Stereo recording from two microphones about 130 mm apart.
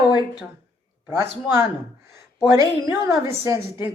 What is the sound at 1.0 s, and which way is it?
Speech, 20° right (ahead or behind).